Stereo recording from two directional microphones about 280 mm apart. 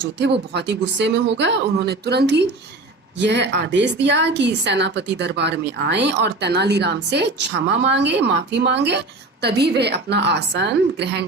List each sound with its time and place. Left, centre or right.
0.5 s a woman's voice: right